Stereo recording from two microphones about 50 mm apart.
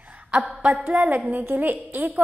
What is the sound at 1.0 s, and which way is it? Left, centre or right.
A woman's voice, right.